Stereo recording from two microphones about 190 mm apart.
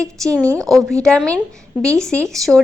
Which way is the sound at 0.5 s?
20° right (ahead or behind).